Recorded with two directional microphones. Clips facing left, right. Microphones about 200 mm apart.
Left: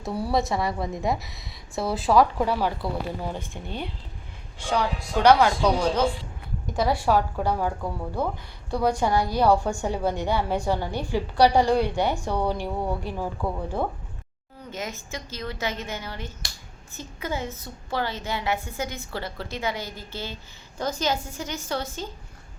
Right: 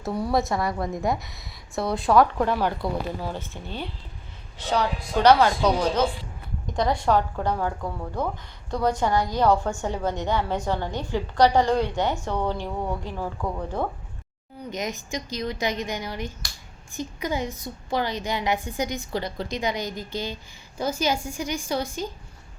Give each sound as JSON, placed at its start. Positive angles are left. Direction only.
{"t": 0.0, "sound": "a woman's voice", "side_deg": 5}
{"t": 4.6, "sound": "a woman's voice", "side_deg": 10}
{"t": 14.7, "sound": "a woman's voice", "side_deg": -15}